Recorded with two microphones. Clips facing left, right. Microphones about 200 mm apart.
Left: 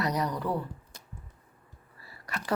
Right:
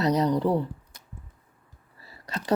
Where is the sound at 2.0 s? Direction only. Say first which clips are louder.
Right 3 dB; 25° right (ahead or behind).